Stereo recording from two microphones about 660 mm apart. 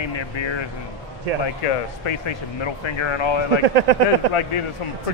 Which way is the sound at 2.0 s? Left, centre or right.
Left.